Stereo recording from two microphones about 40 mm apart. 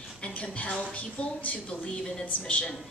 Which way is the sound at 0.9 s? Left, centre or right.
Left.